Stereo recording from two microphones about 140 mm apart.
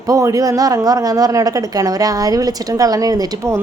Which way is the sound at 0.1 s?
25° right (ahead or behind).